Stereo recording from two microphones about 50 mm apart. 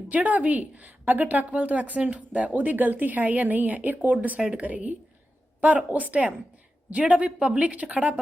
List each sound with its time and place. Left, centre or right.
0.1 s a woman's voice: right